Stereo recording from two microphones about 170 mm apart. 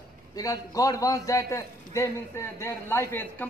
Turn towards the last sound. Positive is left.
turn(degrees=15)  # may be behind; listen again after turning